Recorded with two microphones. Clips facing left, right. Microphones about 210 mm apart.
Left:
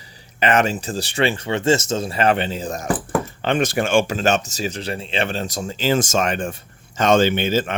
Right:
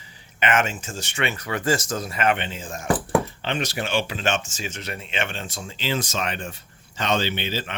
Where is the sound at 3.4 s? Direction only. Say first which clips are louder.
Left 8 dB; 50° left (ahead or behind).